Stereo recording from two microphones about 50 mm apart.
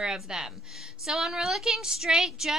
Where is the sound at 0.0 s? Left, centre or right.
Centre.